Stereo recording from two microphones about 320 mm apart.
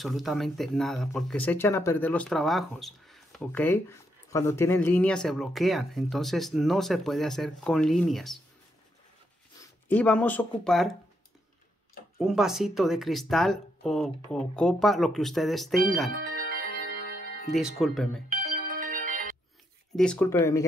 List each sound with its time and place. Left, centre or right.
0.0 s speech: centre
9.6 s speech: centre
12.2 s speech: centre
16.2 s music: right
17.6 s speech: centre
18.3 s music: right
20.0 s speech: centre